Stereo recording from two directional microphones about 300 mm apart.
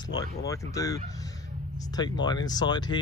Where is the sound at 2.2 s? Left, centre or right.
Centre.